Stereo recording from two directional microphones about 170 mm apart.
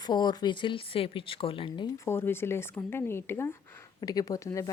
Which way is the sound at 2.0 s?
15° left (ahead or behind).